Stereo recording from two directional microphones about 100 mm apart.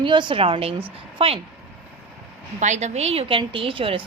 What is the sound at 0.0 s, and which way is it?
A woman's voice, 55° right (ahead or behind).